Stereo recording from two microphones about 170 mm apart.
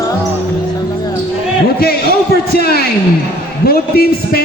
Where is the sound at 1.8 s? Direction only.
65° left (ahead or behind).